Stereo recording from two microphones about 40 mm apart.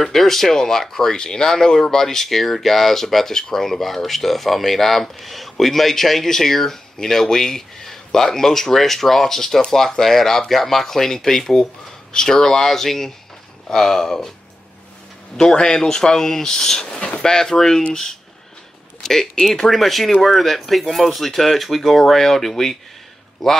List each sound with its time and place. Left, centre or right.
0.0 s speech: centre
15.3 s speech: centre
19.0 s speech: centre